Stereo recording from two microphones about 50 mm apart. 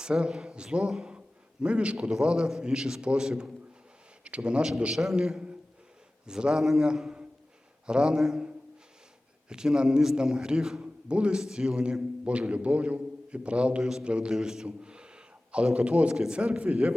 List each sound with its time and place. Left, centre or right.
0.0 s a man's voice: centre
16.1 s a man's voice: centre
16.4 s a man's voice: right